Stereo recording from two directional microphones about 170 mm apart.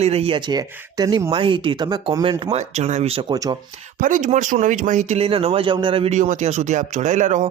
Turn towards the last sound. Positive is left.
turn(degrees=-45)  # may be behind; listen again after turning